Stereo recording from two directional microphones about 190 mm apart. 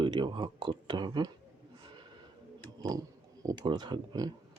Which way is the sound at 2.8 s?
20° right (ahead or behind).